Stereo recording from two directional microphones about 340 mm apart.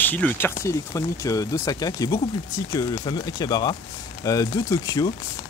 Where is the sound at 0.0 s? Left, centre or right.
Centre.